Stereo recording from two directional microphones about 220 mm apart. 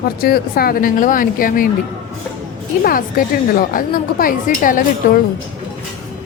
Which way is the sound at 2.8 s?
40° left (ahead or behind).